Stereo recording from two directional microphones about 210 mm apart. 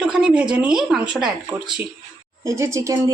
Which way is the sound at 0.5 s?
5° right (ahead or behind).